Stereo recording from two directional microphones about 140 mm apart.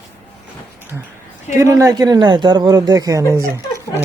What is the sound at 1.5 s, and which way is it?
Speech, 20° right (ahead or behind).